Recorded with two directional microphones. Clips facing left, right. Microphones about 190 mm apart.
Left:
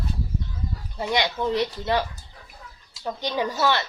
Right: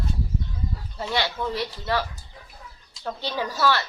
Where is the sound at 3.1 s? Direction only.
15° left (ahead or behind).